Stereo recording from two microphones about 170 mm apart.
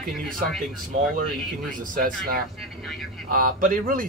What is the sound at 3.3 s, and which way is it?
Speech, 55° right (ahead or behind).